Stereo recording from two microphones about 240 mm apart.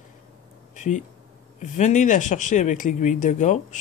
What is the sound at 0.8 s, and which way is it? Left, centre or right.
Speech, left.